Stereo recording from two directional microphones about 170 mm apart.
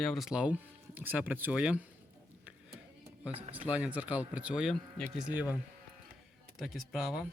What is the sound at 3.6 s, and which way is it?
Speech, 10° right (ahead or behind).